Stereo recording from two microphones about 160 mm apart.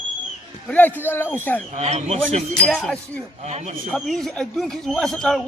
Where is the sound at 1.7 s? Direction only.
45° right (ahead or behind).